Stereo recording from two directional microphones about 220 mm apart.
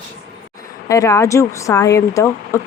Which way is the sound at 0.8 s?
15° left (ahead or behind).